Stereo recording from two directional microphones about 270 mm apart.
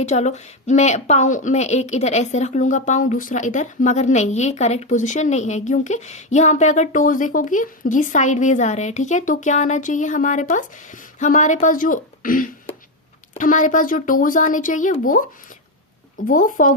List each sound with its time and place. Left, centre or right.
0.0 s a woman's voice: left